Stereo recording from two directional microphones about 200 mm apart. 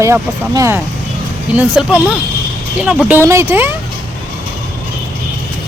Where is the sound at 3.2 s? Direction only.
10° right (ahead or behind).